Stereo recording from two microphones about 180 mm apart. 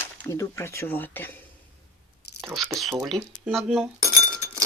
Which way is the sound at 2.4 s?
Centre (ahead or behind).